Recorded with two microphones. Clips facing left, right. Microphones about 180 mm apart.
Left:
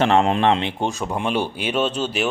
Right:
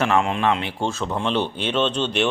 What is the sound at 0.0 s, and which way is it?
Speech, 30° left (ahead or behind).